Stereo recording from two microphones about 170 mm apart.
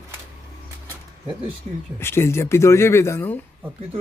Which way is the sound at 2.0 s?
15° left (ahead or behind).